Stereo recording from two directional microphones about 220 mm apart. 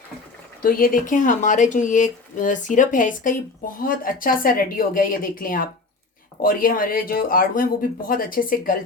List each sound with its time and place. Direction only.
0.6 s speech: 40° left (ahead or behind)